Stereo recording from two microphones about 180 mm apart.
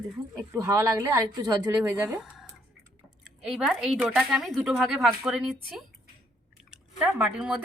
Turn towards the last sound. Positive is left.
turn(degrees=-5)  # may be behind; listen again after turning